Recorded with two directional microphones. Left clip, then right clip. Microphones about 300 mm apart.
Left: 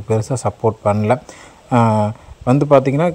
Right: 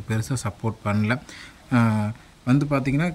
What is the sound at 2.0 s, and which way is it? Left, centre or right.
Speech, left.